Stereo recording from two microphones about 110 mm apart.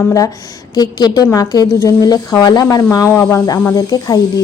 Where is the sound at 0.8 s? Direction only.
40° left (ahead or behind).